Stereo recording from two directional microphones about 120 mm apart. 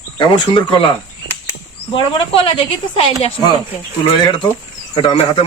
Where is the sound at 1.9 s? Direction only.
45° left (ahead or behind).